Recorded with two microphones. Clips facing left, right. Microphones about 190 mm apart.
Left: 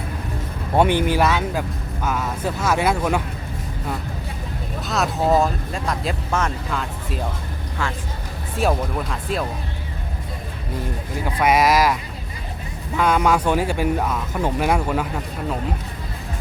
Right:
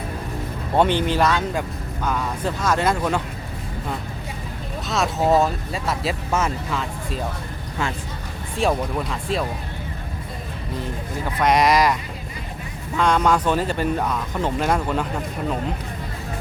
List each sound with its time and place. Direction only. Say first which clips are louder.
0.8 s speech: left 1 dB; 10° left (ahead or behind)
4.9 s speech: even; centre (ahead or behind)
8.5 s speech: even; centre (ahead or behind)
11.3 s speech: even; 5° left (ahead or behind)
13.0 s speech: even; 10° left (ahead or behind)